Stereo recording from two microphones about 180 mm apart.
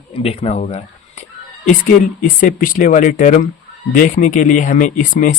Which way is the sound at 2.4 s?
45° left (ahead or behind).